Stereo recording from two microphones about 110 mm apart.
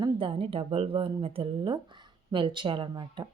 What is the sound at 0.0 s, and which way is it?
Speech, 55° right (ahead or behind).